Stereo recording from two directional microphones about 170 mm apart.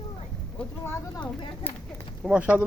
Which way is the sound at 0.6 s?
10° left (ahead or behind).